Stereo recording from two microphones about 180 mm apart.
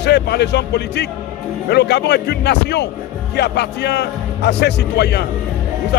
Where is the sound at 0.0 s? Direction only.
70° left (ahead or behind).